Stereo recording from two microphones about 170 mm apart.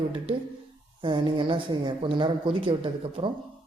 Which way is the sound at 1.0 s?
30° right (ahead or behind).